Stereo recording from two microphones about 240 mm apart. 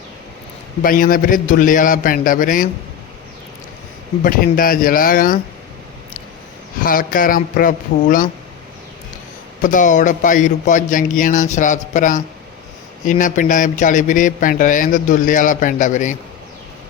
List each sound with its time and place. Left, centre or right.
0.8 s a man's voice: left
4.2 s a man's voice: left
6.8 s a man's voice: left
9.6 s a man's voice: left